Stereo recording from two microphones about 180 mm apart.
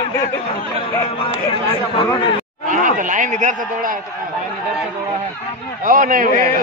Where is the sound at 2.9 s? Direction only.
45° right (ahead or behind).